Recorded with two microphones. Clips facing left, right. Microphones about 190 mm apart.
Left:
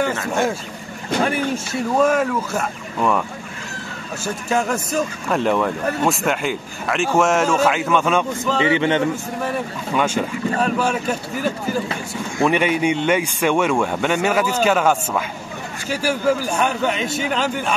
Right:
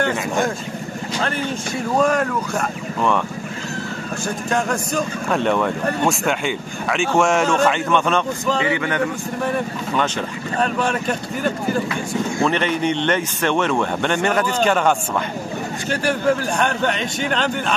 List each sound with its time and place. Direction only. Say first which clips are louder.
1.2 s speech: left 3 dB; 5° left (ahead or behind)
4.5 s speech: left 1 dB; 5° left (ahead or behind)
8.5 s a man's voice: left 3 dB; 25° left (ahead or behind)
9.9 s speech: left 3 dB; 10° left (ahead or behind)